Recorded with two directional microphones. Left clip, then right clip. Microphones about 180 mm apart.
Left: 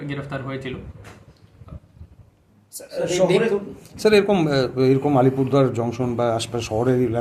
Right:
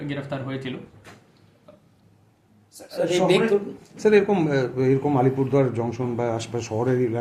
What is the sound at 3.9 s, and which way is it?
A man's voice, 25° left (ahead or behind).